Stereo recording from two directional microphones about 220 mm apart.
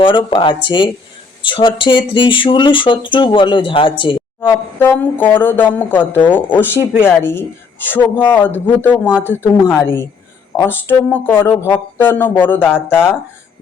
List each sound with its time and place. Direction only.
0.0 s speech: 20° left (ahead or behind)
4.8 s speech: 10° left (ahead or behind)